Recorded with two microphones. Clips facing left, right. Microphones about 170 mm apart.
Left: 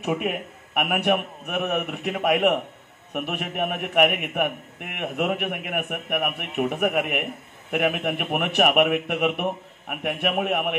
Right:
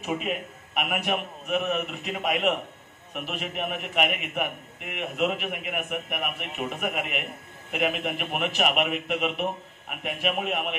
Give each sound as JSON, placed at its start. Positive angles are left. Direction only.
{"t": 0.0, "sound": "a man's voice", "side_deg": 60}